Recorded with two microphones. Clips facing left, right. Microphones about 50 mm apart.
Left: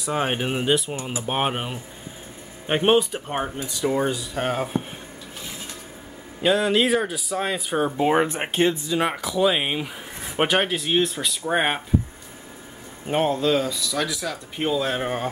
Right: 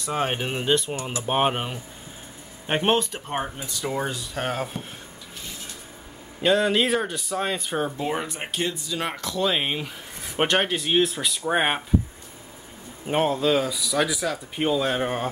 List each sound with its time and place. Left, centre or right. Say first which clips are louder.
0.0 s speech: left 2 dB; centre
6.4 s speech: left 1 dB; centre
8.0 s speech: left 8 dB; left
8.8 s speech: left 5 dB; centre
13.0 s speech: left 1 dB; centre